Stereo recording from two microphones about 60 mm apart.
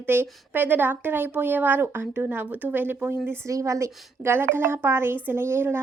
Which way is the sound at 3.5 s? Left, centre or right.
Right.